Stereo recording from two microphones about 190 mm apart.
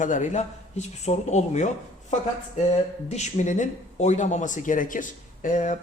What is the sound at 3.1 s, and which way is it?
Speech, 40° left (ahead or behind).